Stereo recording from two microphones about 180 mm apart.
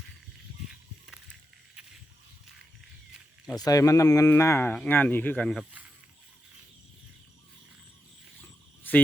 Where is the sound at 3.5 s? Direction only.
20° left (ahead or behind).